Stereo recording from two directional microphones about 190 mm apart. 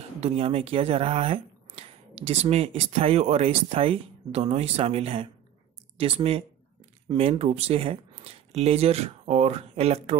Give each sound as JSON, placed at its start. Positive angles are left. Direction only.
{"t": 0.2, "sound": "speech", "side_deg": -30}